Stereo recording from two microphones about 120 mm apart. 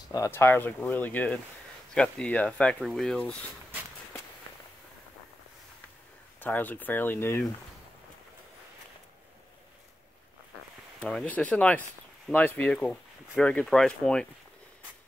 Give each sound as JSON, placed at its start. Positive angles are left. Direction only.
{"t": 0.3, "sound": "speech", "side_deg": 20}
{"t": 6.4, "sound": "speech", "side_deg": 15}
{"t": 11.0, "sound": "speech", "side_deg": 5}